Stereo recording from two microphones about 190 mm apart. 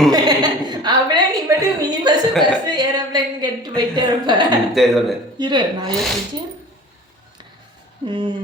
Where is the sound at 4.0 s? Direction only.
25° right (ahead or behind).